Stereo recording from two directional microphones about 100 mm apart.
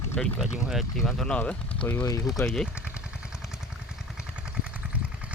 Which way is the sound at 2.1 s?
35° left (ahead or behind).